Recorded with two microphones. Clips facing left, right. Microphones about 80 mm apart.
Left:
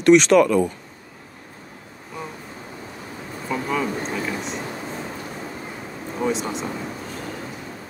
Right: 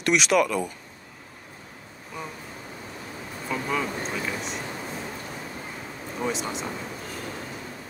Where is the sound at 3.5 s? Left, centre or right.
Centre.